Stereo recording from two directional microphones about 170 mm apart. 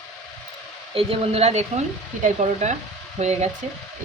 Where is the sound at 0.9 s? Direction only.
35° right (ahead or behind).